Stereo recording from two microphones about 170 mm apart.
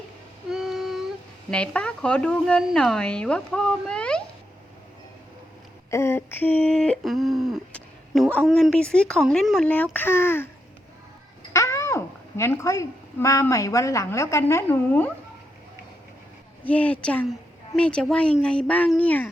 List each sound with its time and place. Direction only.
0.5 s a sound: centre (ahead or behind)
1.5 s speech: 5° left (ahead or behind)
5.9 s speech: 15° left (ahead or behind)
11.5 s speech: 15° left (ahead or behind)
16.6 s speech: 10° left (ahead or behind)